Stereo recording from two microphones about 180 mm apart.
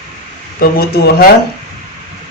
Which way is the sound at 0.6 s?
60° left (ahead or behind).